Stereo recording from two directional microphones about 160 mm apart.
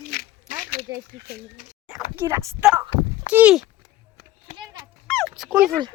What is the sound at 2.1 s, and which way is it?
Speech, 15° right (ahead or behind).